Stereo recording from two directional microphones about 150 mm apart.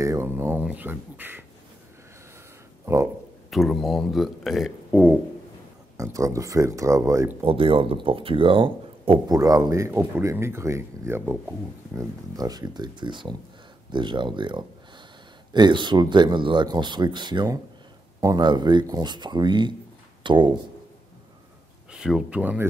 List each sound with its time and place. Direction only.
0.0 s speech: 20° right (ahead or behind)
2.8 s a sound: 20° right (ahead or behind)
3.4 s speech: centre (ahead or behind)
5.9 s speech: 20° right (ahead or behind)
7.4 s speech: 35° right (ahead or behind)
9.3 s speech: 25° right (ahead or behind)
12.4 s speech: 25° right (ahead or behind)
21.9 s speech: 5° right (ahead or behind)